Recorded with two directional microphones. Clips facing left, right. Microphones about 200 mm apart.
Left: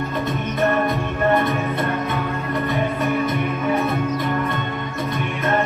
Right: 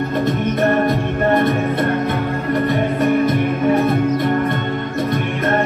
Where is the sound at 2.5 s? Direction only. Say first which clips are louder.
Right 5 dB; 65° right (ahead or behind).